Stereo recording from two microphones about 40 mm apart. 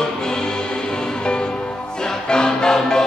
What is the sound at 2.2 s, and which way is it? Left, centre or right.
Music, centre.